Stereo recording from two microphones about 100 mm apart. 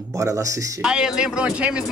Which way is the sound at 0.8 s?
5° right (ahead or behind).